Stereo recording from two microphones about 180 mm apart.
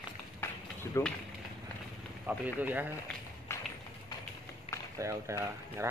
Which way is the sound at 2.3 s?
10° right (ahead or behind).